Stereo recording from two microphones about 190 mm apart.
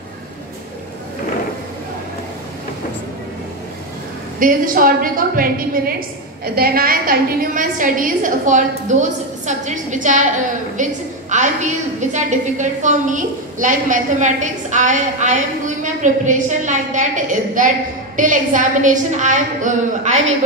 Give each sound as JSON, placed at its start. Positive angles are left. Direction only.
{"t": 4.4, "sound": "a woman's voice", "side_deg": -45}